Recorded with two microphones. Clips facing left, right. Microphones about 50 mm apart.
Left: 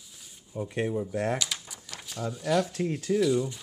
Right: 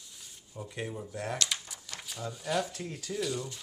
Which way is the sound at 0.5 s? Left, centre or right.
Left.